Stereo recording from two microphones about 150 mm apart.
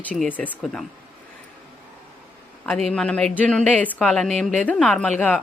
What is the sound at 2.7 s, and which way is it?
A woman's voice, 5° left (ahead or behind).